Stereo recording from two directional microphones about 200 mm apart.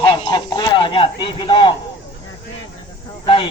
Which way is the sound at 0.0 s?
25° left (ahead or behind).